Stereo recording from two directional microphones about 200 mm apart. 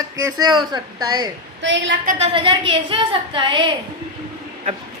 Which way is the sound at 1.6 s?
70° right (ahead or behind).